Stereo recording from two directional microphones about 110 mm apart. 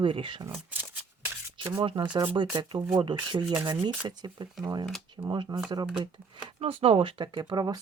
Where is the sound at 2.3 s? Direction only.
45° right (ahead or behind).